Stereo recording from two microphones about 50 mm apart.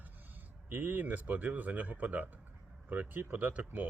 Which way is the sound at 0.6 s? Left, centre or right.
Right.